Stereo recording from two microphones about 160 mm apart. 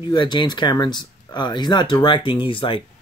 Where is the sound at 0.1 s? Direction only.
30° left (ahead or behind).